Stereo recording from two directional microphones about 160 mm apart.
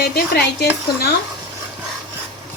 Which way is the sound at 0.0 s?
85° left.